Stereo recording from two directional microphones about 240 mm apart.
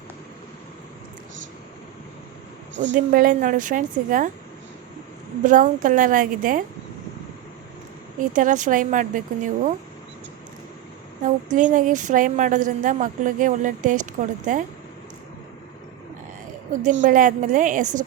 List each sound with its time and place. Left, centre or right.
2.9 s a woman's voice: right
5.4 s a woman's voice: right
8.2 s a woman's voice: right
11.5 s a woman's voice: right
16.8 s a woman's voice: right